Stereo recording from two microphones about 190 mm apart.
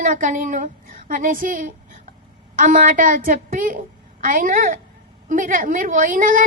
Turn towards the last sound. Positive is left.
turn(degrees=-45)  # may be behind; listen again after turning